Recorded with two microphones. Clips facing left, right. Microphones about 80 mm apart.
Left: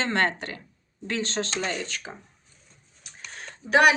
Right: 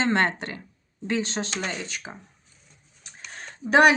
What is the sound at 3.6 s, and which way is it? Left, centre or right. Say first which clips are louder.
Speech: right 2 dB; right.